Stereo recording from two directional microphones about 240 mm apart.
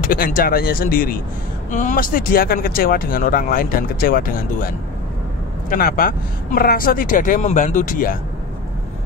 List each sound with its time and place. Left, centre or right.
0.1 s speech: left